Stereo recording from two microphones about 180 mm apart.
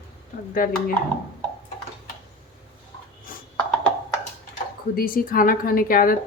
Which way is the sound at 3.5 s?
5° left (ahead or behind).